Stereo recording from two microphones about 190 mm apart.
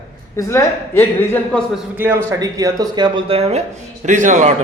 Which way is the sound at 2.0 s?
10° right (ahead or behind).